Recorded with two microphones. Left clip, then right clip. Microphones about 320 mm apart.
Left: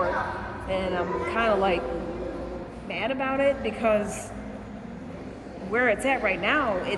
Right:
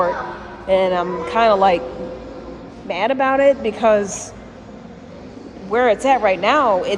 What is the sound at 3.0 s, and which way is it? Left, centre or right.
A man's voice, centre.